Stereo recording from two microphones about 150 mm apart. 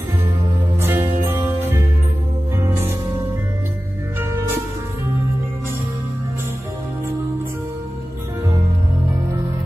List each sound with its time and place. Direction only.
0.7 s music: 15° right (ahead or behind)
4.2 s music: 15° right (ahead or behind)